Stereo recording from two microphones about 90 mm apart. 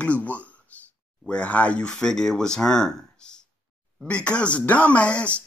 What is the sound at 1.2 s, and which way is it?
Speech, 15° left (ahead or behind).